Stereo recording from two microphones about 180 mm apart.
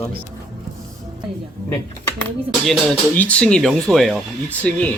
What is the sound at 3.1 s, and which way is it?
Speech, 10° left (ahead or behind).